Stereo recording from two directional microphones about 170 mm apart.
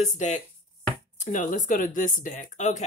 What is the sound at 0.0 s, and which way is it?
Speech, 45° left (ahead or behind).